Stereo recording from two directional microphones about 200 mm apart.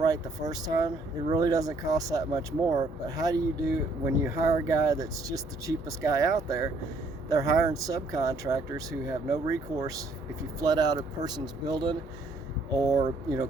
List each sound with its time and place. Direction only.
0.0 s speech: 20° right (ahead or behind)
10.6 s speech: 20° right (ahead or behind)